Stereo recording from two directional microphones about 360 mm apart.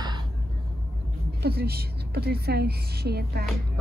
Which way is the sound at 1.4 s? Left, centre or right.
Right.